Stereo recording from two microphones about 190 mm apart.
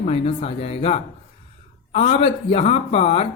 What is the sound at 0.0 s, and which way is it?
Speech, 30° left (ahead or behind).